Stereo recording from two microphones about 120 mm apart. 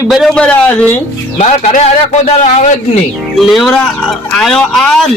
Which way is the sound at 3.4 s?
Centre (ahead or behind).